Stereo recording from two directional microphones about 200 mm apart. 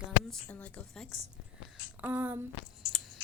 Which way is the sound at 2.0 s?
10° right (ahead or behind).